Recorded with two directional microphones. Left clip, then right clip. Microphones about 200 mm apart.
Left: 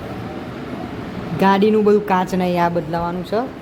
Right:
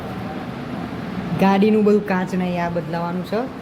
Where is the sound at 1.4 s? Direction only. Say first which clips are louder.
Left 2 dB; 15° left (ahead or behind).